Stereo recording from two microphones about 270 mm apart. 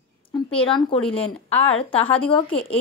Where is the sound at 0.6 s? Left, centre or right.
Centre.